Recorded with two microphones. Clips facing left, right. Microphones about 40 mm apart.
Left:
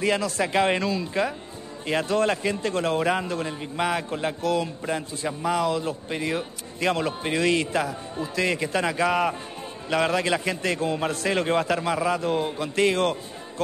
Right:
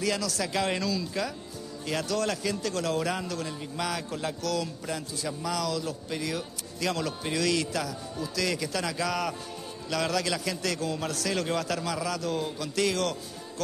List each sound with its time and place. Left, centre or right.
0.0 s a man's voice: left